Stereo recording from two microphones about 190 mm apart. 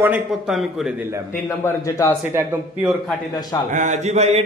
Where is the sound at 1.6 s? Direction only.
15° left (ahead or behind).